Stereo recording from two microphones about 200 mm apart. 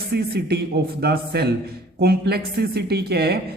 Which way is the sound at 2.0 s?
50° right (ahead or behind).